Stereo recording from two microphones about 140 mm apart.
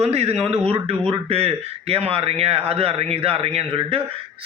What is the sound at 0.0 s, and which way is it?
A man's voice, 45° right (ahead or behind).